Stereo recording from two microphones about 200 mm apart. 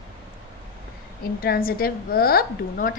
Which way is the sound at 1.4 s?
50° left (ahead or behind).